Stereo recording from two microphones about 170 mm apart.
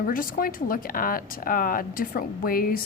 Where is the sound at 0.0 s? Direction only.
55° left (ahead or behind).